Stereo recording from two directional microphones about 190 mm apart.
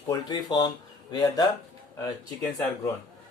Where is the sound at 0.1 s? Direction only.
20° left (ahead or behind).